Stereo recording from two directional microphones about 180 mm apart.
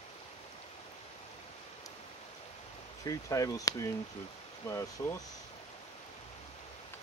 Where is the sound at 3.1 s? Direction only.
20° left (ahead or behind).